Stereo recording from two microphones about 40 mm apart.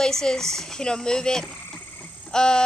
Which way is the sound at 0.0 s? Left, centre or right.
Centre.